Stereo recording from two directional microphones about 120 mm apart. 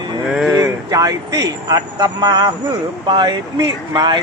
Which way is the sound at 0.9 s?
30° right (ahead or behind).